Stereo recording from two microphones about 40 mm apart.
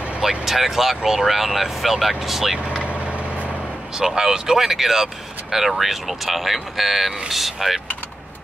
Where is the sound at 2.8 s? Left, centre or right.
Right.